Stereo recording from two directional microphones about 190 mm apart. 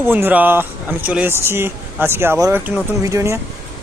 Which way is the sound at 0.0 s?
10° right (ahead or behind).